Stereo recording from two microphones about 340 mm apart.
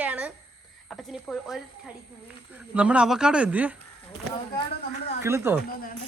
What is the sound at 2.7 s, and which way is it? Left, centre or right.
Speech, centre.